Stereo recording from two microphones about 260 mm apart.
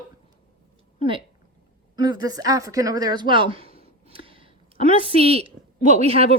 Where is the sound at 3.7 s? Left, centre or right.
Right.